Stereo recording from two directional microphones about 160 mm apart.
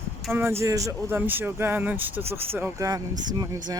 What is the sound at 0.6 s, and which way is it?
Speech, 20° right (ahead or behind).